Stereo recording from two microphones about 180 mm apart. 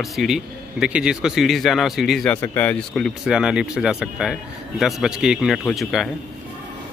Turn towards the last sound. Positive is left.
turn(degrees=0)  # may be behind; listen again after turning